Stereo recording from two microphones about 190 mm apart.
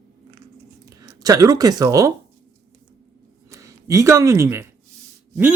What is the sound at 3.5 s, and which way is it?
Speech, 15° right (ahead or behind).